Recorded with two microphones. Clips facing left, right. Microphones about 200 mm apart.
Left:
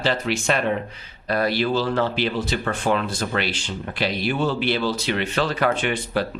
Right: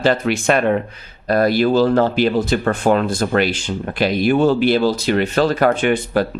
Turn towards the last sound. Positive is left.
turn(degrees=-50)  # may be behind; listen again after turning